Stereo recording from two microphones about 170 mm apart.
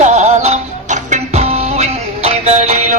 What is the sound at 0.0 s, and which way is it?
Music, 45° right (ahead or behind).